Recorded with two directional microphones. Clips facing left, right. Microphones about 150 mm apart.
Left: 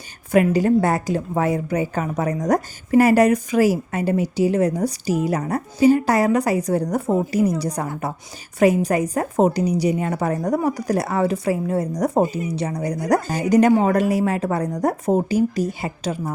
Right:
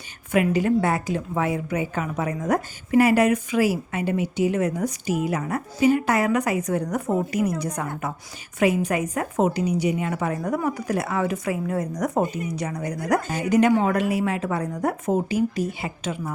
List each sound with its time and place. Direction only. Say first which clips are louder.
0.3 s a woman's voice: left 4 dB; 40° left (ahead or behind)